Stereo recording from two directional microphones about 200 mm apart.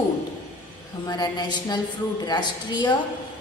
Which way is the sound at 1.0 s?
20° left (ahead or behind).